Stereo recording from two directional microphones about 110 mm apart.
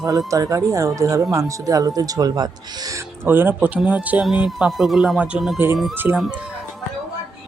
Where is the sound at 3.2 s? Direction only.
20° right (ahead or behind).